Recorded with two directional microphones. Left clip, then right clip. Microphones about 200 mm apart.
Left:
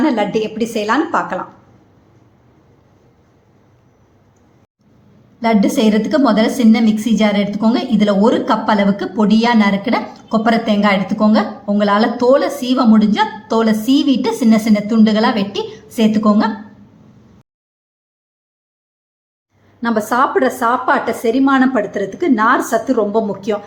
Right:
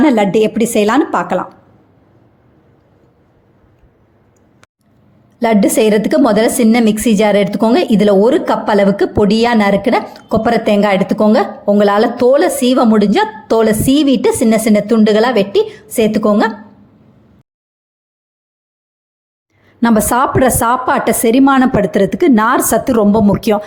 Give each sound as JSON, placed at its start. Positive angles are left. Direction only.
{"t": 0.0, "sound": "a woman's voice", "side_deg": -35}
{"t": 5.4, "sound": "a woman's voice", "side_deg": -40}
{"t": 19.8, "sound": "a woman's voice", "side_deg": -45}